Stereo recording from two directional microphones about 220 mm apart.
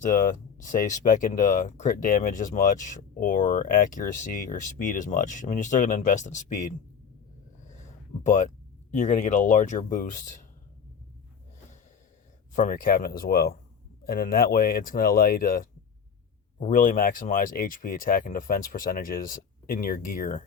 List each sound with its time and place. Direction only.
0.0 s speech: 35° left (ahead or behind)
7.6 s a sound: 35° left (ahead or behind)
9.0 s speech: 35° left (ahead or behind)
12.5 s speech: 35° left (ahead or behind)